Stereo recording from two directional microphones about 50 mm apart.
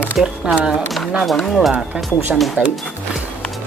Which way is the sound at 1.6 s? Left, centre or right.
Centre.